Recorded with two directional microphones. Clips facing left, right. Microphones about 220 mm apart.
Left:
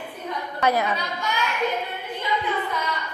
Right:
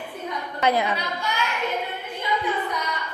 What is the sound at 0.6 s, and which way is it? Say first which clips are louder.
Speech: even; 20° right (ahead or behind).